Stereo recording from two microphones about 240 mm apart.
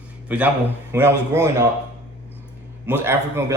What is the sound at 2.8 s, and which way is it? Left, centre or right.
Speech, centre.